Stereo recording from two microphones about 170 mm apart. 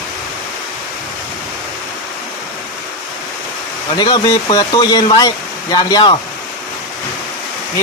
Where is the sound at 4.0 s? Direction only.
25° left (ahead or behind).